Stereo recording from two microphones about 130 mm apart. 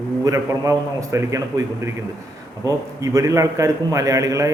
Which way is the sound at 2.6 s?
25° right (ahead or behind).